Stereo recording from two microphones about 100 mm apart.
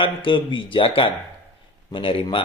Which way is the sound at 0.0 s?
55° left (ahead or behind).